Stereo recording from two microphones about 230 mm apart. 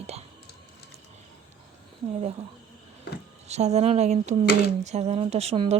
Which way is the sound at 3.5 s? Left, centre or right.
Right.